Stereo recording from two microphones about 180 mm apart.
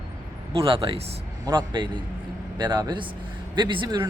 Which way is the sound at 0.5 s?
30° right (ahead or behind).